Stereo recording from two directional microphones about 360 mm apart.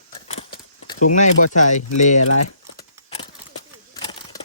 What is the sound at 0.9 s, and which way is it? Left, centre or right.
Speech, centre.